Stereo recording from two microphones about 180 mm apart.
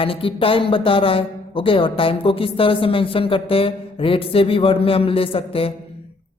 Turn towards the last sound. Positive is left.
turn(degrees=30)  # may be behind; listen again after turning